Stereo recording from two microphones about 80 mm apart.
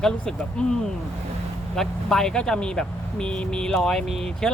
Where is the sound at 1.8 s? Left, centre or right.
Centre.